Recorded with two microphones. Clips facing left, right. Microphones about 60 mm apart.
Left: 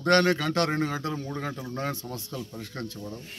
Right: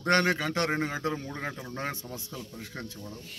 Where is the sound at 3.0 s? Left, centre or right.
Centre.